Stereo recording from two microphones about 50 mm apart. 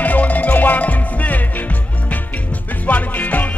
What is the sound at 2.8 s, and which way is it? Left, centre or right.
Music, left.